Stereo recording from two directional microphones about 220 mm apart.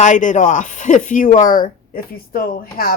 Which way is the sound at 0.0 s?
35° left (ahead or behind).